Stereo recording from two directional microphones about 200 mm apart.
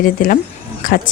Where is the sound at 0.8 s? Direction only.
45° left (ahead or behind).